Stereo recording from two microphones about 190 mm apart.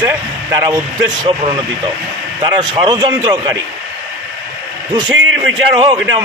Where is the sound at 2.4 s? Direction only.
20° right (ahead or behind).